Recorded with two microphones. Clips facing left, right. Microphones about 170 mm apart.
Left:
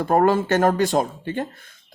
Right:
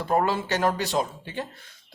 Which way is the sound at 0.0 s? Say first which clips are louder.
Left 6 dB; 50° left (ahead or behind).